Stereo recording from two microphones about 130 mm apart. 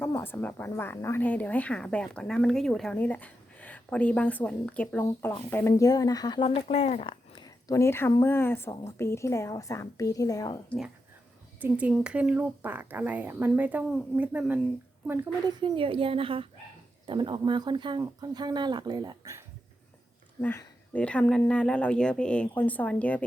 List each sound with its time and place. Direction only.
0.0 s speech: 15° left (ahead or behind)
11.6 s speech: 10° right (ahead or behind)
15.4 s a woman's voice: 40° right (ahead or behind)
20.4 s speech: 15° left (ahead or behind)